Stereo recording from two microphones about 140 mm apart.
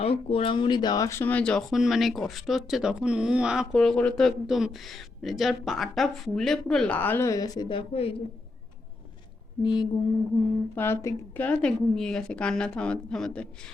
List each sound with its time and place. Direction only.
0.0 s speech: 45° left (ahead or behind)
9.6 s mantra: 35° left (ahead or behind)
10.8 s a woman's voice: 15° left (ahead or behind)